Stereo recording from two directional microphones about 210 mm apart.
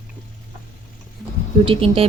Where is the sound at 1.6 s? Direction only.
25° right (ahead or behind).